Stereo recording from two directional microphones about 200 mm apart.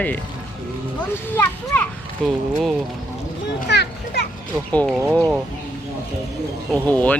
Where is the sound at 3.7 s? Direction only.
55° left (ahead or behind).